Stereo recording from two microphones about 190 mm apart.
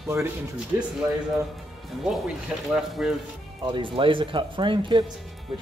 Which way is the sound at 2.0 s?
Centre (ahead or behind).